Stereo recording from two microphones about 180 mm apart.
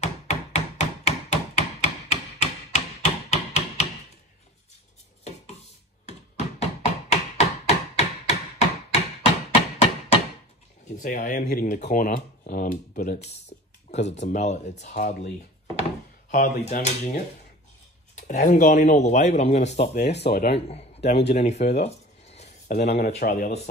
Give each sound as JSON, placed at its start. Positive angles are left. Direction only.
{"t": 0.0, "sound": "hammer", "side_deg": 40}
{"t": 6.0, "sound": "a sound", "side_deg": 40}
{"t": 11.0, "sound": "speech", "side_deg": 50}
{"t": 13.3, "sound": "speech", "side_deg": 40}
{"t": 16.3, "sound": "speech", "side_deg": 45}
{"t": 16.8, "sound": "speech", "side_deg": 40}
{"t": 20.2, "sound": "speech", "side_deg": 60}
{"t": 20.5, "sound": "speech", "side_deg": 35}
{"t": 22.9, "sound": "speech", "side_deg": 50}